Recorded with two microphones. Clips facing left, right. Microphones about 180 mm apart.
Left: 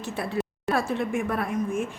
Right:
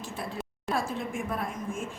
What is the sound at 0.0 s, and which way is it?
A woman's voice, 70° left (ahead or behind).